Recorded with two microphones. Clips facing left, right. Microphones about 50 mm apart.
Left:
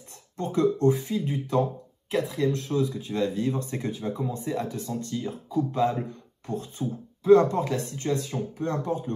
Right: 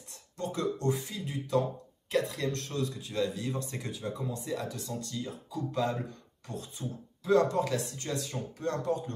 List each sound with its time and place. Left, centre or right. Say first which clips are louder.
0.4 s speech: left 9 dB; left
2.0 s speech: left 5 dB; centre; by 9.1 s left